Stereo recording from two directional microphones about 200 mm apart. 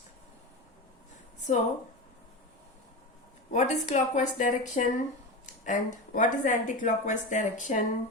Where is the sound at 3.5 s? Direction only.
35° left (ahead or behind).